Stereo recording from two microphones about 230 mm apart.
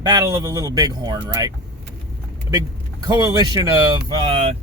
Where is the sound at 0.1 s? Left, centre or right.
Centre.